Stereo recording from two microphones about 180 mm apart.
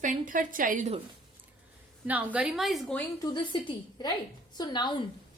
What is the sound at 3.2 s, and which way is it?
A woman's voice, 25° left (ahead or behind).